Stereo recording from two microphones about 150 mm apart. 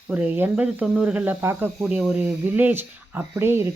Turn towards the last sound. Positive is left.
turn(degrees=-15)  # may be behind; listen again after turning